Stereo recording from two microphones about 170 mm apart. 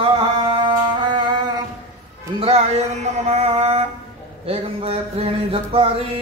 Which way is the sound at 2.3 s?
35° right (ahead or behind).